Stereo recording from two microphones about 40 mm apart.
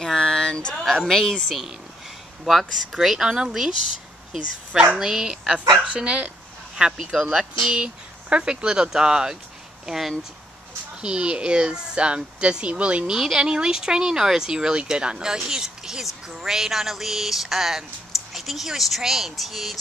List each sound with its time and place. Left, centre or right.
0.0 s a sound: centre
0.9 s speech: centre
2.4 s speech: centre
4.9 s speech: centre; by 6.9 s right
7.2 s speech: centre
7.6 s speech: right
9.8 s speech: centre
11.0 s speech: right
13.1 s speech: centre